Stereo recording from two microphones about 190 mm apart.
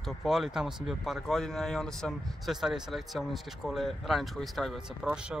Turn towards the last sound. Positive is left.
turn(degrees=0)  # may be behind; listen again after turning